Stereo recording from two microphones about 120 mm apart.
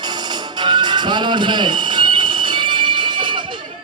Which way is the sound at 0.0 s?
35° right (ahead or behind).